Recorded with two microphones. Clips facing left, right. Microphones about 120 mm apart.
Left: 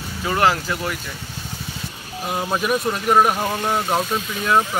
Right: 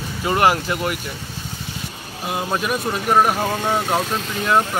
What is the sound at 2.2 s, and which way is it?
Speech, centre (ahead or behind).